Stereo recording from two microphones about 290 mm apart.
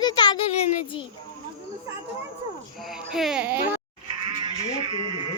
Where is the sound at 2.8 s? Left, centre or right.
Centre.